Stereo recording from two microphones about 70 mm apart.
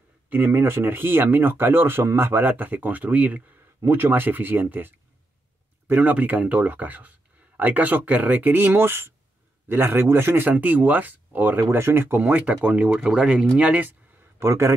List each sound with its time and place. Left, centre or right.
0.3 s speech: right
11.7 s speech: right
12.2 s speech: right
13.6 s speech: right
14.4 s a man's voice: right